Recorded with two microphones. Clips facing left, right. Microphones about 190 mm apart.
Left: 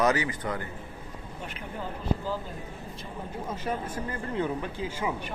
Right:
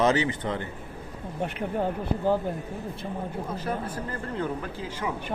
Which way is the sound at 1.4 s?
60° right (ahead or behind).